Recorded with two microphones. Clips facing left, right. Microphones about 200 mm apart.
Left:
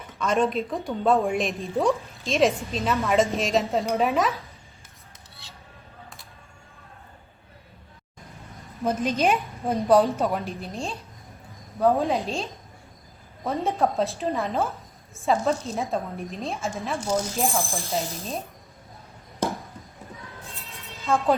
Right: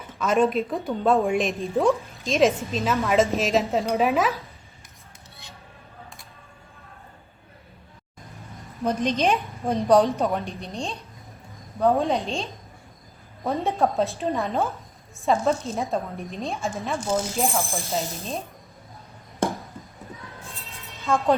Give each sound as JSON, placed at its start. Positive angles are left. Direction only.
{"t": 0.2, "sound": "a woman's voice", "side_deg": -5}
{"t": 5.4, "sound": "dishes", "side_deg": -15}
{"t": 8.8, "sound": "a woman's voice", "side_deg": 5}
{"t": 21.0, "sound": "a woman's voice", "side_deg": 0}